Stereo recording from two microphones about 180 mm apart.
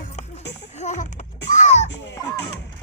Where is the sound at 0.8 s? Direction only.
40° left (ahead or behind).